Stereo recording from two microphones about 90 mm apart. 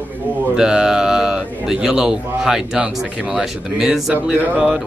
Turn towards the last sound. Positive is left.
turn(degrees=-15)  # may be behind; listen again after turning